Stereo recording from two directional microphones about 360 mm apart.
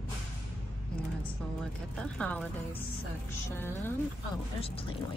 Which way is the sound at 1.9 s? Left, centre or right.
Centre.